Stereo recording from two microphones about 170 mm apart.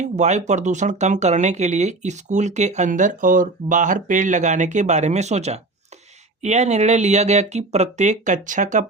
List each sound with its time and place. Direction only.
0.0 s speech: 45° right (ahead or behind)